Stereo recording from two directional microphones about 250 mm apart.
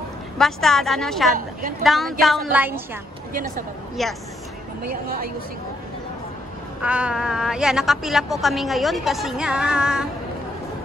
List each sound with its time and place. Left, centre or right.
0.4 s a woman's voice: centre
4.0 s a woman's voice: centre
5.0 s speech: right
6.8 s a woman's voice: centre